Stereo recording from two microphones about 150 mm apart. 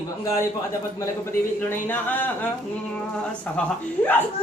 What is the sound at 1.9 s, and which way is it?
Speech, 10° left (ahead or behind).